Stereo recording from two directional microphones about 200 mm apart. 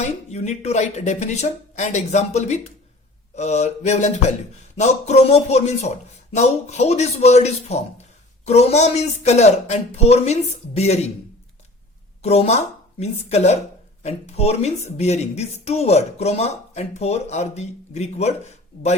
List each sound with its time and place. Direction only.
0.0 s speech: 35° left (ahead or behind)
12.2 s speech: 30° left (ahead or behind)